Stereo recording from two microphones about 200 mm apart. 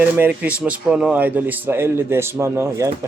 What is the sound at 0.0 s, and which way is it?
Speech, 10° right (ahead or behind).